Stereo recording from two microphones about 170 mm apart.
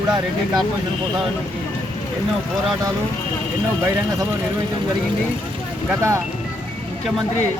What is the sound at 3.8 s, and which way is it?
Speech, 20° right (ahead or behind).